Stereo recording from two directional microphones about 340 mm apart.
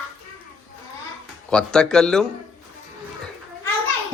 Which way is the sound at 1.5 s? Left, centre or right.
Centre.